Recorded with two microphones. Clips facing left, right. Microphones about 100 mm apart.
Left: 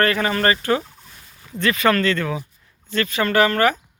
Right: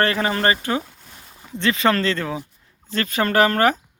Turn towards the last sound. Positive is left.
turn(degrees=-40)  # may be behind; listen again after turning